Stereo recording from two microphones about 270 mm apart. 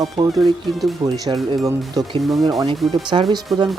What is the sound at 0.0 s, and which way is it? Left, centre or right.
Speech, centre.